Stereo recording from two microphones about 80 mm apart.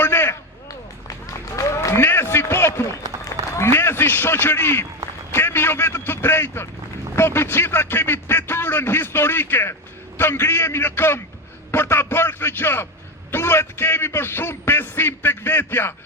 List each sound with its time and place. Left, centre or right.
0.0 s a sound: left
1.0 s run: left
3.6 s a man's voice: left